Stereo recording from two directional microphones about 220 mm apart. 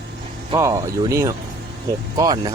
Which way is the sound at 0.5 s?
15° right (ahead or behind).